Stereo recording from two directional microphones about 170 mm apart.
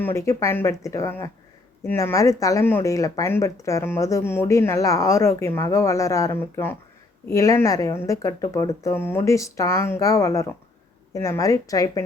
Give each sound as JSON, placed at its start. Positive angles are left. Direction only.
{"t": 0.0, "sound": "a woman's voice", "side_deg": 15}